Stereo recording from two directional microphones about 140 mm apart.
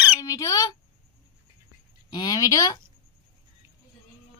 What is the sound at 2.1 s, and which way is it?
Speech, 25° left (ahead or behind).